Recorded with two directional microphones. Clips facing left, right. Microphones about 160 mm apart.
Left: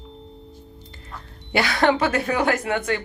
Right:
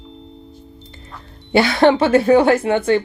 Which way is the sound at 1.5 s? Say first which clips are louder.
Right 7 dB; 25° right (ahead or behind).